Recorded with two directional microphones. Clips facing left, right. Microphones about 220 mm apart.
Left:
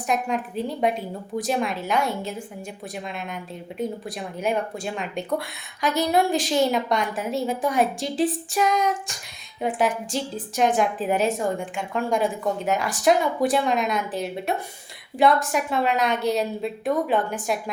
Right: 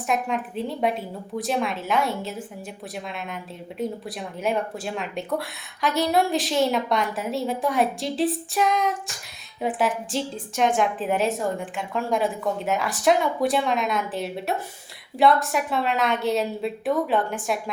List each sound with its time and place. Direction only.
0.1 s a woman's voice: centre (ahead or behind)